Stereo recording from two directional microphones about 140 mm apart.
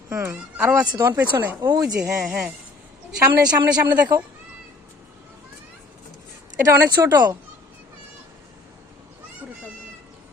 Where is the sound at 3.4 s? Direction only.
30° right (ahead or behind).